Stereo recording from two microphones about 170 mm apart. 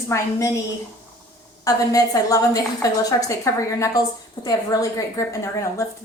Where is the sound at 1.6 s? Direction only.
20° left (ahead or behind).